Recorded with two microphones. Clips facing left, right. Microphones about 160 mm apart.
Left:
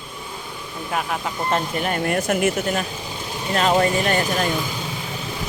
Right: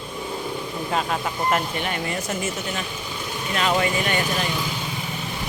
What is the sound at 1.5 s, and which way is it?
Speech, 40° left (ahead or behind).